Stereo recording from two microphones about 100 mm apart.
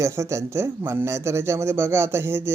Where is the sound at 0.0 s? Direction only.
30° right (ahead or behind).